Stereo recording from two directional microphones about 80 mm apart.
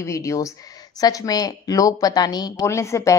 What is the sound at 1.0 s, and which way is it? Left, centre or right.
A woman's voice, left.